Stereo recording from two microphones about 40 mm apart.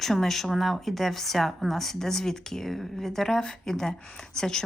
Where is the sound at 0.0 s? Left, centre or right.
Centre.